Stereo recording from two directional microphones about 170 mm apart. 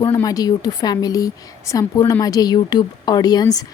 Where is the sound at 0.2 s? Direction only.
20° left (ahead or behind).